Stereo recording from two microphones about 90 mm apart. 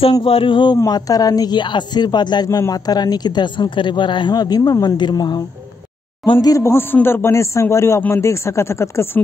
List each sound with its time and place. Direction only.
0.2 s speech: 80° left
0.8 s speech: 45° left (ahead or behind)
4.9 s speech: 55° left (ahead or behind)
6.4 s a man's voice: 35° left (ahead or behind)